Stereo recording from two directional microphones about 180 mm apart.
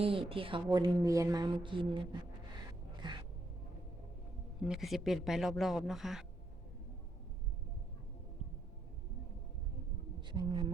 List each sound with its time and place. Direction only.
0.0 s a woman's voice: 30° right (ahead or behind)
3.0 s cat: 25° right (ahead or behind)
4.6 s speech: centre (ahead or behind)
10.2 s speech: 25° right (ahead or behind)